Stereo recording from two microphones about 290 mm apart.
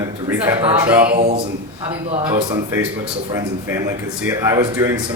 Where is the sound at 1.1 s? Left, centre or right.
Right.